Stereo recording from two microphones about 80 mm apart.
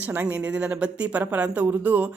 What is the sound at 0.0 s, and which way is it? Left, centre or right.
A woman's voice, right.